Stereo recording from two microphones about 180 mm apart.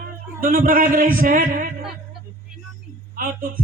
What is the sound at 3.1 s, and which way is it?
Speech, 50° right (ahead or behind).